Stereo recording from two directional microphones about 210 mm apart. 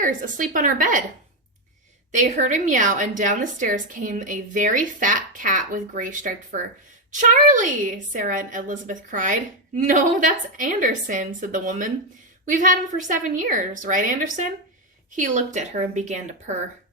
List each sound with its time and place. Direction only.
0.0 s a woman's voice: 40° right (ahead or behind)
2.1 s a woman's voice: 35° right (ahead or behind)